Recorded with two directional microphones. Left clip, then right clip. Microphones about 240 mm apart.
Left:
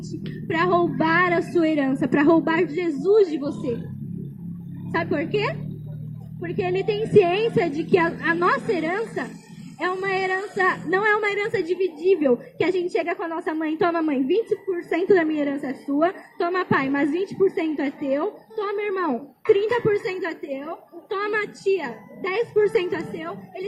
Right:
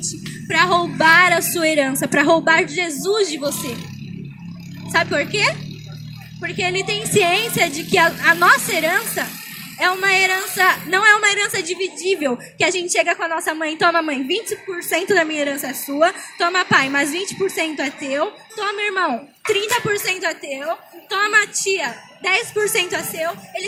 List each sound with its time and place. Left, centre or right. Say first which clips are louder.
0.4 s speech: right 4 dB; right
4.9 s speech: right 6 dB; right